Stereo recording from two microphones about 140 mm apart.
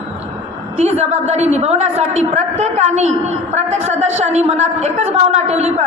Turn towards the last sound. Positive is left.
turn(degrees=-50)  # may be behind; listen again after turning